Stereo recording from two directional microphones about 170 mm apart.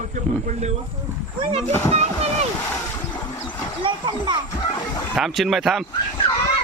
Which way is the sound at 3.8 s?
30° right (ahead or behind).